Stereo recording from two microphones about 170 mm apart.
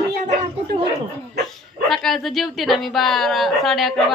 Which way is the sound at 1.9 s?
Centre (ahead or behind).